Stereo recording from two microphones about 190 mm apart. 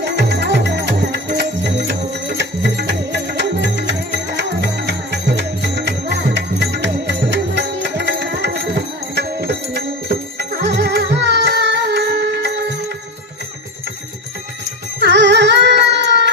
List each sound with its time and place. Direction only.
0.2 s music: 65° right (ahead or behind)
15.0 s music: 65° right (ahead or behind)